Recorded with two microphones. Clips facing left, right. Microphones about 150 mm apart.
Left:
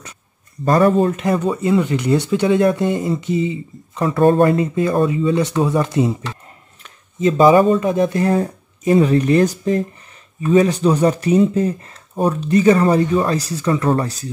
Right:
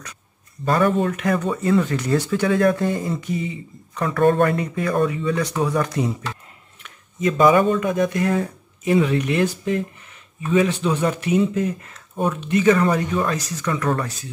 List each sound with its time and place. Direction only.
0.7 s speech: 35° left (ahead or behind)